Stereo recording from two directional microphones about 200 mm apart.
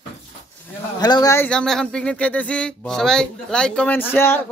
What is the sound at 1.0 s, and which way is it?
Speech, 20° left (ahead or behind).